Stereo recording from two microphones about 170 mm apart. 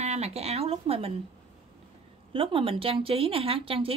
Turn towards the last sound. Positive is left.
turn(degrees=-35)  # may be behind; listen again after turning